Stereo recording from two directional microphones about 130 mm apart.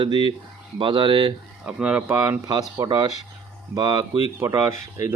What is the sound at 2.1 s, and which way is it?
Speech, 25° right (ahead or behind).